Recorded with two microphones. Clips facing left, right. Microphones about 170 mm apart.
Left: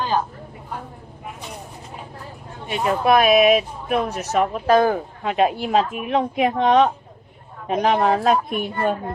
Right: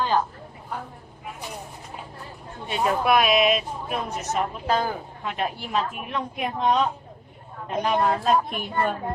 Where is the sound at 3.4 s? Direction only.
65° left (ahead or behind); by 8.3 s 90° left.